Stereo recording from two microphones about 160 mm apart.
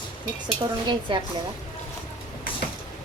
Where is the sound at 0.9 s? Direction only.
30° right (ahead or behind).